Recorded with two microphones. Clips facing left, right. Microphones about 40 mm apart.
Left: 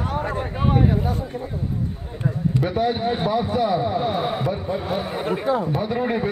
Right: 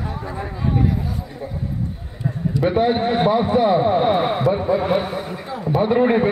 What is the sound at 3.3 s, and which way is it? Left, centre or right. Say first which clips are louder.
A man's voice: right 5 dB; right.